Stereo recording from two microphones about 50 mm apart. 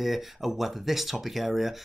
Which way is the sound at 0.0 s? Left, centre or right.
Centre.